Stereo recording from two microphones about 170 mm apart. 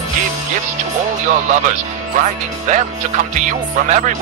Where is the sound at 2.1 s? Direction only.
45° right (ahead or behind).